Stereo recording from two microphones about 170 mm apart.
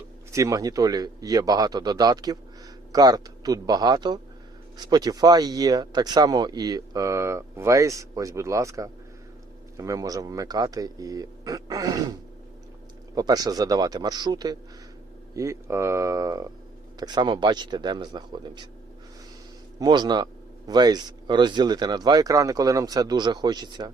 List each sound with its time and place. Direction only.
0.3 s speech: 20° right (ahead or behind)
13.1 s speech: 20° right (ahead or behind)
19.8 s speech: 25° right (ahead or behind)